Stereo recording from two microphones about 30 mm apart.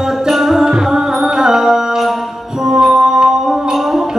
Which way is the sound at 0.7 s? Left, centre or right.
Centre.